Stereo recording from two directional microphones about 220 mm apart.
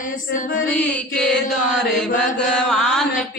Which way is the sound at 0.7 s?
5° left (ahead or behind).